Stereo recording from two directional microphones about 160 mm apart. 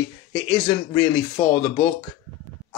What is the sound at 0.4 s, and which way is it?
Speech, 25° left (ahead or behind).